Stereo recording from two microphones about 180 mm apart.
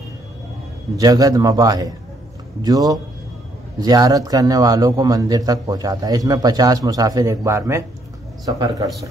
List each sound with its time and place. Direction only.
0.9 s a man's voice: 20° right (ahead or behind)